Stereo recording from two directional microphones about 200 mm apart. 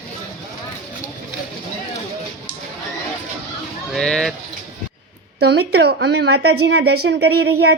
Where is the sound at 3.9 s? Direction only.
5° left (ahead or behind).